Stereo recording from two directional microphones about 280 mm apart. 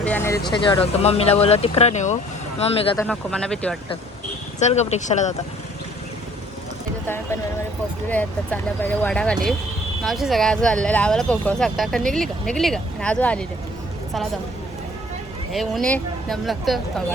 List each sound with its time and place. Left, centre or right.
0.0 s speech: centre
2.9 s speech: centre
4.6 s speech: left
8.1 s speech: centre
15.5 s speech: centre